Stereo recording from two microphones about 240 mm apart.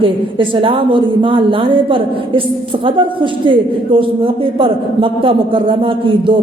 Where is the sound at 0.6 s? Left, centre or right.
Right.